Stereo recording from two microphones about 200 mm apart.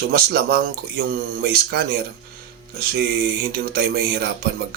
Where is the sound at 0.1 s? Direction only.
50° right (ahead or behind).